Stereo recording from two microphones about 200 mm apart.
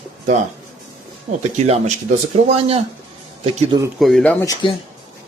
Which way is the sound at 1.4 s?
35° right (ahead or behind).